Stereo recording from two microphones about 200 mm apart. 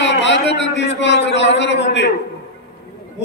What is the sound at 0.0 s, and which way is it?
A man's voice, 60° left (ahead or behind).